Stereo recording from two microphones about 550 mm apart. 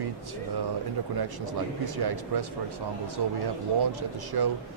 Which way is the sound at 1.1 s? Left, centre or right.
Right.